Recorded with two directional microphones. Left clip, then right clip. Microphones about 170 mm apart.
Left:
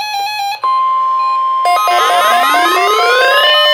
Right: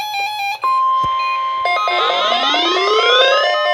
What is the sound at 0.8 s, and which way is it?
Music, 45° left (ahead or behind).